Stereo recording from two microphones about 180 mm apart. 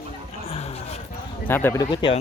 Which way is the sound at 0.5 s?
35° left (ahead or behind).